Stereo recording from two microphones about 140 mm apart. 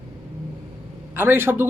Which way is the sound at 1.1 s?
15° right (ahead or behind).